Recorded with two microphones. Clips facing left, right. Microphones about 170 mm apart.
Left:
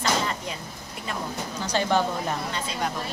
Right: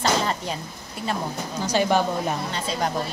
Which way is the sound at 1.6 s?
10° right (ahead or behind).